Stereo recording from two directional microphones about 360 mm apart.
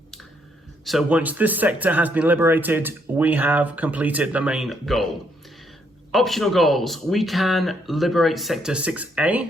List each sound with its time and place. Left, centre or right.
0.9 s speech: centre
6.1 s speech: centre